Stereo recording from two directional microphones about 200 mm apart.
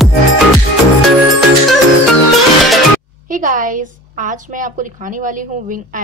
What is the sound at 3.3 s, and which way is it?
A woman's voice, 40° right (ahead or behind).